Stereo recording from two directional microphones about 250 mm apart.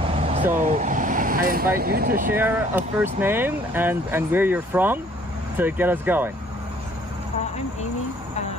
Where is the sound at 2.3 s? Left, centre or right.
Centre.